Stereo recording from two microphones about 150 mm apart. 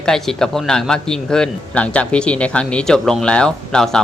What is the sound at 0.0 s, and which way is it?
A man's voice, 5° left (ahead or behind).